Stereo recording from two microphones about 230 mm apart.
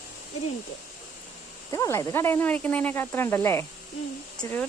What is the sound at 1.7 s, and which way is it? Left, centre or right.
Speech, centre.